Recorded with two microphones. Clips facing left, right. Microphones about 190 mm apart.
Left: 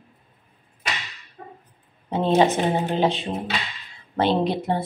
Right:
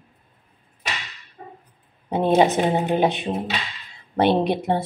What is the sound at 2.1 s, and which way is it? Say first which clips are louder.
Speech: right 1 dB; 15° right (ahead or behind).